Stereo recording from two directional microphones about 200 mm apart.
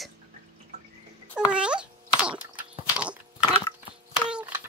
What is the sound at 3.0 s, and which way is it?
Crunch, 5° right (ahead or behind).